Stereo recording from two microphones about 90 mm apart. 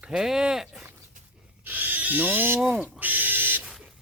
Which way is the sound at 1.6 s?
20° right (ahead or behind).